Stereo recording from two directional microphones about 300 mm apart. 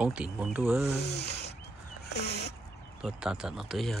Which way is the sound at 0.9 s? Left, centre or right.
Left.